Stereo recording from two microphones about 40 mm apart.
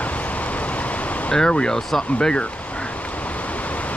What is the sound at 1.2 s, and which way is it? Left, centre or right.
Speech, left.